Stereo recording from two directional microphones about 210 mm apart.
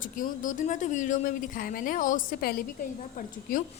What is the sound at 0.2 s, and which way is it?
A woman's voice, 35° left (ahead or behind).